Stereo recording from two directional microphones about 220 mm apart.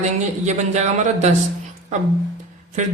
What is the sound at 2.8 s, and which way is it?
Speech, 35° right (ahead or behind).